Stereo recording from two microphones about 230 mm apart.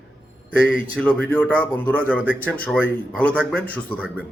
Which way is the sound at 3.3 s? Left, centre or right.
Centre.